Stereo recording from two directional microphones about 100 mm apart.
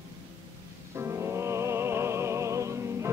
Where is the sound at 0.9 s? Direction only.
25° right (ahead or behind).